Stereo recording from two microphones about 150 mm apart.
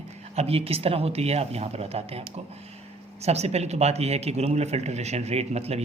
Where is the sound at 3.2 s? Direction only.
45° right (ahead or behind).